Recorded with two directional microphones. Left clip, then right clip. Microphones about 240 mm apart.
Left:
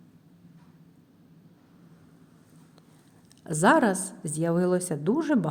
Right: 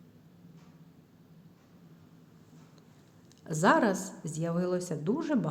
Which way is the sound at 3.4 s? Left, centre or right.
Left.